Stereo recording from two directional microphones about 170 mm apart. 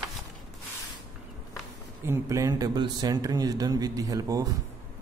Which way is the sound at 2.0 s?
15° right (ahead or behind).